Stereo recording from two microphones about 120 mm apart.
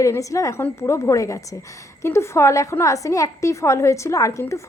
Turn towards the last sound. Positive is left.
turn(degrees=25)  # may be behind; listen again after turning